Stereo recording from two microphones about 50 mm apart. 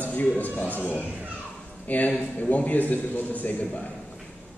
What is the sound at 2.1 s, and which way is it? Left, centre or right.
A man's voice, left.